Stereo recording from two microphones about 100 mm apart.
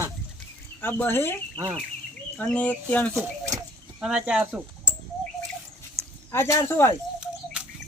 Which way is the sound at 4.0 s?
5° right (ahead or behind).